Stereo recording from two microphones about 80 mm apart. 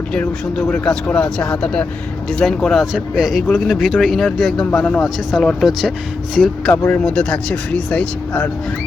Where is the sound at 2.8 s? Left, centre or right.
Centre.